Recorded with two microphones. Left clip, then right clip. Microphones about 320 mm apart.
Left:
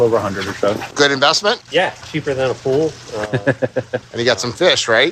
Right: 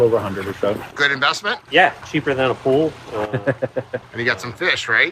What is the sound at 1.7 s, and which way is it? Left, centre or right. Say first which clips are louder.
Speech: right 2 dB; centre.